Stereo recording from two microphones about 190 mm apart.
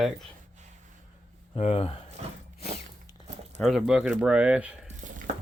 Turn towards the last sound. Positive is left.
turn(degrees=-40)  # may be behind; listen again after turning